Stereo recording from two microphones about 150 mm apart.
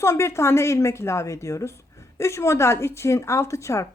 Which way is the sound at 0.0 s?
20° left (ahead or behind).